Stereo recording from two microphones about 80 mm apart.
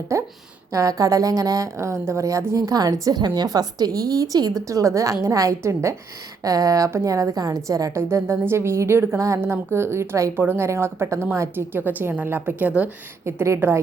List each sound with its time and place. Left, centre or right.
0.1 s a woman's voice: right
7.9 s a woman's voice: right
10.3 s a woman's voice: right
13.2 s a woman's voice: right